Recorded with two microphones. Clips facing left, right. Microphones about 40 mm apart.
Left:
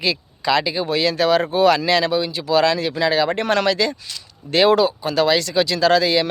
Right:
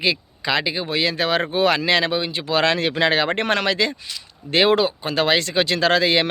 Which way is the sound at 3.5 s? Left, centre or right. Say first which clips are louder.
Left 2 dB; right.